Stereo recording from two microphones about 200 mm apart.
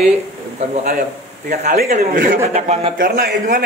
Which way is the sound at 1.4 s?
45° right (ahead or behind).